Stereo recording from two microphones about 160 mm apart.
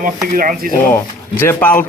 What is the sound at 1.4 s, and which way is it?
Speech, 10° left (ahead or behind).